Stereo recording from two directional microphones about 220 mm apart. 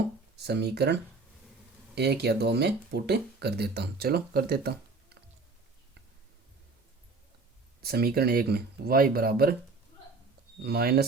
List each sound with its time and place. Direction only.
0.3 s speech: 50° right (ahead or behind)
2.0 s speech: 50° right (ahead or behind)
7.8 s speech: 45° right (ahead or behind)
10.6 s speech: 45° right (ahead or behind)